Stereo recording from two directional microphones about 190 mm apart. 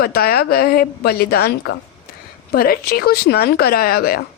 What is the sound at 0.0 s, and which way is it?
A woman's voice, 55° left (ahead or behind).